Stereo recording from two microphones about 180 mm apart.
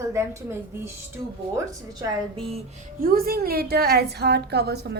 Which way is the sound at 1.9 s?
30° right (ahead or behind).